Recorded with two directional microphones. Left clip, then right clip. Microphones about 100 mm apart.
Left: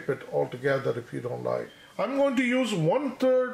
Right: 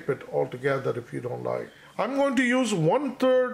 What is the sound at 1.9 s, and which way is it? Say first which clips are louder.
Speech: right 1 dB; 50° right (ahead or behind).